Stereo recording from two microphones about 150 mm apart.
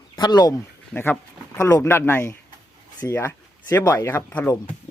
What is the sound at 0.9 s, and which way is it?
Speech, 10° left (ahead or behind).